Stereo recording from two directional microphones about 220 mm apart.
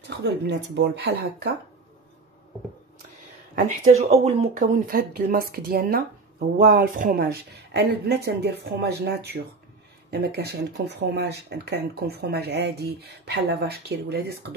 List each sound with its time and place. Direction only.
0.2 s speech: 50° right (ahead or behind)
3.5 s speech: 35° right (ahead or behind)